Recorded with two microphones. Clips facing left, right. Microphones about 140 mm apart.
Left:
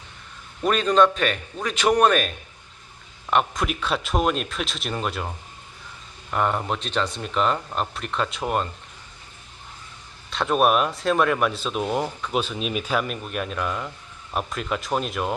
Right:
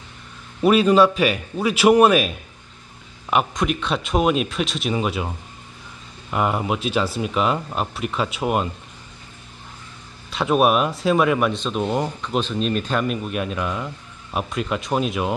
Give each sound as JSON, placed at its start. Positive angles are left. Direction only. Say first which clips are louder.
{"t": 0.6, "sound": "speech", "louder": "right 4 dB", "side_deg": -10}
{"t": 6.3, "sound": "speech", "louder": "right 2 dB", "side_deg": -5}
{"t": 10.3, "sound": "speech", "louder": "right 2 dB", "side_deg": -5}